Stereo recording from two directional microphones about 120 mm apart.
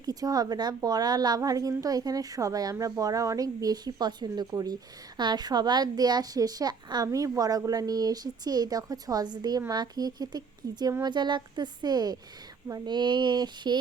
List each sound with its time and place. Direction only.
0.0 s a woman's voice: 30° right (ahead or behind)